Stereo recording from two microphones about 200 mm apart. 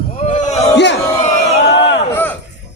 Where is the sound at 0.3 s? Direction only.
35° left (ahead or behind).